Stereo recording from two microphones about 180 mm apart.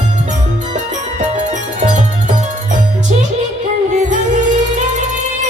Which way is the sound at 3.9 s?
45° right (ahead or behind).